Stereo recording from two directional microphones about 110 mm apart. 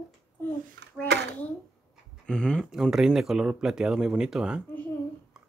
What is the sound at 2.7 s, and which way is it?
Speech, 5° right (ahead or behind).